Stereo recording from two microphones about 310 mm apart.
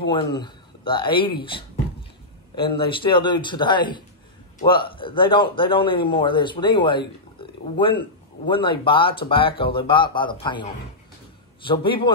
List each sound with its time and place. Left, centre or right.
0.0 s speech: centre
2.5 s a man's voice: centre